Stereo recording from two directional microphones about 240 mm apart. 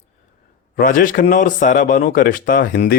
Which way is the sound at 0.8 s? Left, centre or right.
Left.